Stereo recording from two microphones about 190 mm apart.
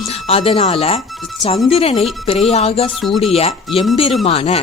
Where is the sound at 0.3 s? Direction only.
30° left (ahead or behind).